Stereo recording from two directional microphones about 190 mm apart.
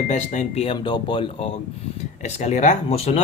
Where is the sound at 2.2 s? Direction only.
35° left (ahead or behind).